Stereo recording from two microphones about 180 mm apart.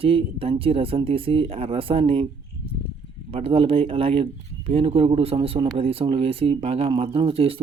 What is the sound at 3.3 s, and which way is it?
Speech, 30° right (ahead or behind).